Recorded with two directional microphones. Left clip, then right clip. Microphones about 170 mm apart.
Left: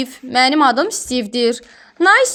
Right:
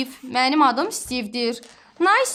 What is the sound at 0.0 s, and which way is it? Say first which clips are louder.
A woman's voice: left 6 dB; 25° left (ahead or behind).